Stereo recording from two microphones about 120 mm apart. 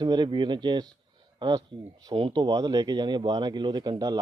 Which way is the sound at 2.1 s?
40° right (ahead or behind).